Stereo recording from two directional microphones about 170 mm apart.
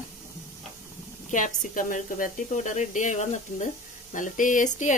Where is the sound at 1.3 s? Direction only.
50° left (ahead or behind).